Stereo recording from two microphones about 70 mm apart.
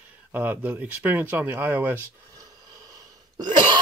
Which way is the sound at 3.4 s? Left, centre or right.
Right.